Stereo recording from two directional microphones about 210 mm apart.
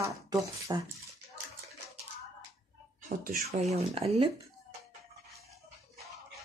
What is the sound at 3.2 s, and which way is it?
Speech, 30° right (ahead or behind).